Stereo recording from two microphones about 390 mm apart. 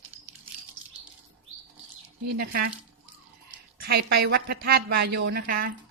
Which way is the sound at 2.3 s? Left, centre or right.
Right.